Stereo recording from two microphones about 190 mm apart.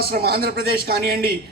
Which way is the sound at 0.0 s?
55° right (ahead or behind).